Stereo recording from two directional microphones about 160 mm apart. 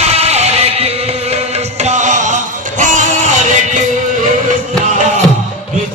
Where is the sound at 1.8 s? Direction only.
50° right (ahead or behind).